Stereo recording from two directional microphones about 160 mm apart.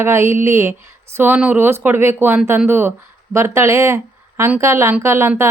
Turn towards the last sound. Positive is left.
turn(degrees=-15)  # may be behind; listen again after turning